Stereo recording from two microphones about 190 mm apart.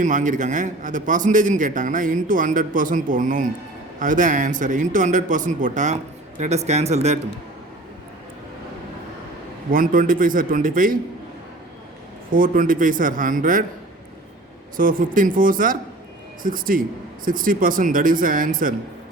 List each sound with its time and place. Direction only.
0.0 s a man's voice: 40° right (ahead or behind)
9.7 s a man's voice: 45° right (ahead or behind)
12.3 s a man's voice: 45° right (ahead or behind)
14.8 s a man's voice: 45° right (ahead or behind)